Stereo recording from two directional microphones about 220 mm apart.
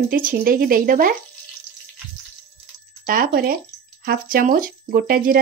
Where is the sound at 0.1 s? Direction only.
40° right (ahead or behind).